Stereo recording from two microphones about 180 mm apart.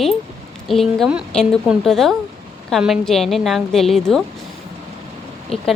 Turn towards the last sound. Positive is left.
turn(degrees=35)  # may be behind; listen again after turning